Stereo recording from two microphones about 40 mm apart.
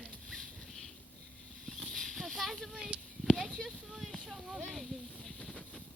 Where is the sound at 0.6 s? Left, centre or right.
Centre.